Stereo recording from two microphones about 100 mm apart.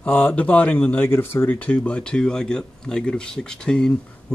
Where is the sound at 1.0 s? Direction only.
25° left (ahead or behind); by 3.9 s 10° left (ahead or behind).